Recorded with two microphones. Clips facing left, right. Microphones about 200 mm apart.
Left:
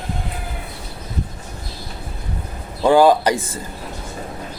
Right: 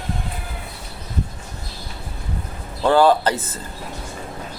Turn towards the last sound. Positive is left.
turn(degrees=15)  # may be behind; listen again after turning